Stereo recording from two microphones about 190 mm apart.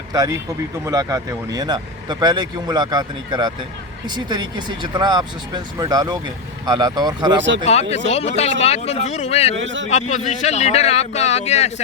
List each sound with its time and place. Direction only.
0.1 s speech: 20° right (ahead or behind)
7.3 s a man's voice: 70° right (ahead or behind)
7.6 s speech: 35° left (ahead or behind)
9.6 s a man's voice: 75° right (ahead or behind)
9.9 s speech: 35° left (ahead or behind)